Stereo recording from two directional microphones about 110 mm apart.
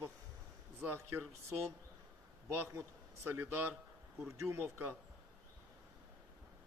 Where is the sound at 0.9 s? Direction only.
20° right (ahead or behind).